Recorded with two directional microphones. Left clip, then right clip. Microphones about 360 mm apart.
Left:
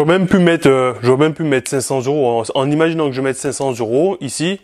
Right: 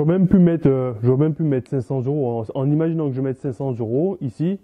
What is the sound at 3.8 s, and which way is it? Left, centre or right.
Speech, left.